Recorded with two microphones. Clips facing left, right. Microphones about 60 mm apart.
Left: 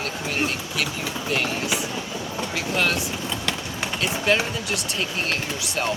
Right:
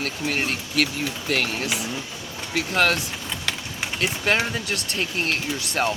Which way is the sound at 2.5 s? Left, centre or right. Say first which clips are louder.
Right 3 dB; right.